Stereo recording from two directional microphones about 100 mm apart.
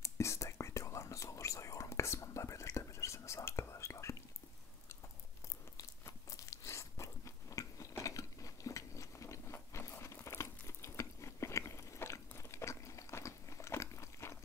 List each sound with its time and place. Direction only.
0.0 s whispering: 30° left (ahead or behind)
5.8 s biting: 35° left (ahead or behind)